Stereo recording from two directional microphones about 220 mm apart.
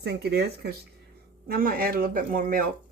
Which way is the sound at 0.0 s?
50° right (ahead or behind).